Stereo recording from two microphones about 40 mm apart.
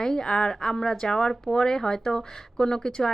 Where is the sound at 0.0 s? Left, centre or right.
Centre.